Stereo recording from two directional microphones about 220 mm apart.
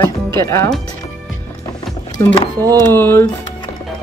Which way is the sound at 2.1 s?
15° left (ahead or behind).